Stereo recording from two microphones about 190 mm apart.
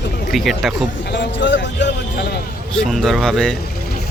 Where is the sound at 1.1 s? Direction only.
70° left (ahead or behind).